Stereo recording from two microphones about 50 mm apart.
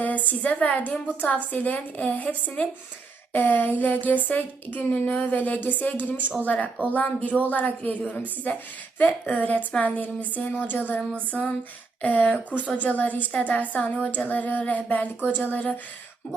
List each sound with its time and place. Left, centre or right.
0.0 s a woman's voice: left
11.1 s a sound: left
12.0 s a woman's voice: left